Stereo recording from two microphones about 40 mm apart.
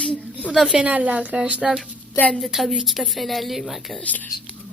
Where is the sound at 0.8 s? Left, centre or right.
Right.